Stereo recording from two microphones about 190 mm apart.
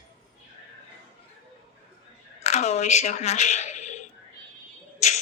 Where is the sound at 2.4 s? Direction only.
35° left (ahead or behind).